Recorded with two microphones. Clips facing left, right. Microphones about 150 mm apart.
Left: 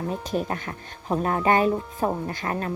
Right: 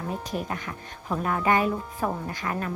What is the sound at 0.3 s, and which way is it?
Speech, 30° left (ahead or behind).